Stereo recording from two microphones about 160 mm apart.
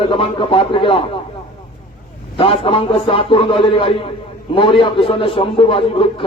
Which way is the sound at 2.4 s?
35° left (ahead or behind).